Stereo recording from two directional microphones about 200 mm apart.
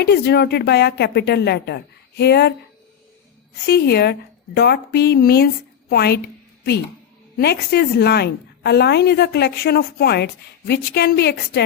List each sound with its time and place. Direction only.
0.0 s speech: 55° left (ahead or behind)
3.7 s a woman's voice: 55° left (ahead or behind)
7.3 s a woman's voice: 55° left (ahead or behind)